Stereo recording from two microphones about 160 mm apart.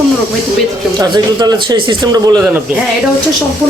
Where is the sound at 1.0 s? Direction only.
25° right (ahead or behind).